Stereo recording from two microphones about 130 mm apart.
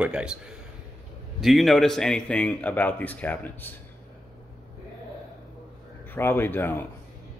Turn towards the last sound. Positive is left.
turn(degrees=15)  # may be behind; listen again after turning